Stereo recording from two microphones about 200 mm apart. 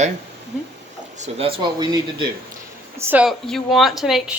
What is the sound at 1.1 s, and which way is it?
Speech, 35° right (ahead or behind).